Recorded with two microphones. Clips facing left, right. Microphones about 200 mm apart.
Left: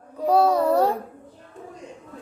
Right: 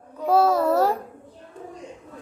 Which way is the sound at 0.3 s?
Centre (ahead or behind).